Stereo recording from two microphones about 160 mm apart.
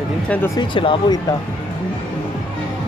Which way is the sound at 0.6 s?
30° left (ahead or behind).